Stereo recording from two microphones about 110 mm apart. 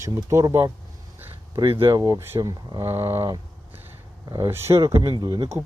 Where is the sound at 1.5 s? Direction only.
50° right (ahead or behind).